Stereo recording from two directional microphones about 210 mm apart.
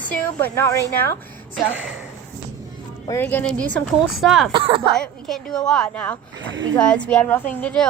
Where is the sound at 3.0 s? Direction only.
10° left (ahead or behind).